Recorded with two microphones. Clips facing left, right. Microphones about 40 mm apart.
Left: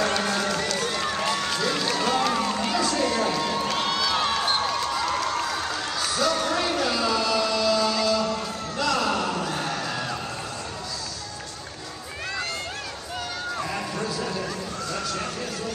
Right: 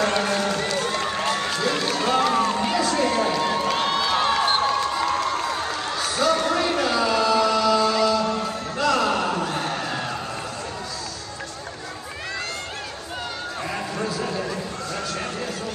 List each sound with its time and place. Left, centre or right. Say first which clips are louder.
0.0 s run: right 2 dB; right
2.7 s crowd: right 2 dB; right
6.1 s a sound: right 3 dB; right